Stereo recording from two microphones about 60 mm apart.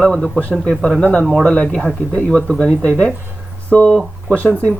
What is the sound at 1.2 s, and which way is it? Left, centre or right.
Speech, centre.